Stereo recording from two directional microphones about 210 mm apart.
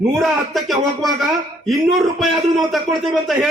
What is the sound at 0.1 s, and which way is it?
A man's voice, centre (ahead or behind).